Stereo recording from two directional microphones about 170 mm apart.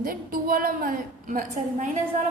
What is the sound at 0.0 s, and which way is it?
A woman's voice, 55° right (ahead or behind).